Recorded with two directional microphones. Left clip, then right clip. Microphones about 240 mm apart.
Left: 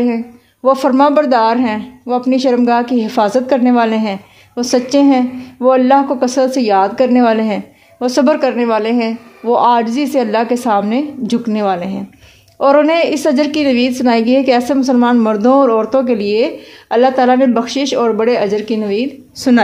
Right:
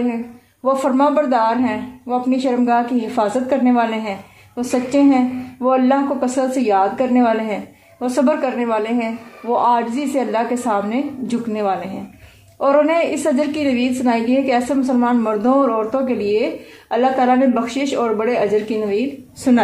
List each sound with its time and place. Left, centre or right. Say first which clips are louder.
0.7 s a woman's voice: left 5 dB; left